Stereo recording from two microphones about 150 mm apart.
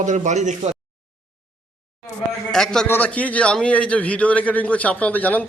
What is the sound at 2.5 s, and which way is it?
A man's voice, 5° left (ahead or behind).